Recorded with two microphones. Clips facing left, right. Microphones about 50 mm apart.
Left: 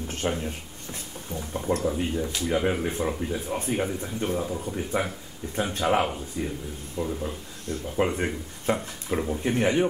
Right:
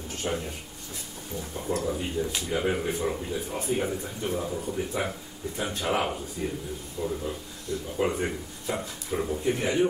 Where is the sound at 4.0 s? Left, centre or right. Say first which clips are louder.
Left 2 dB; left.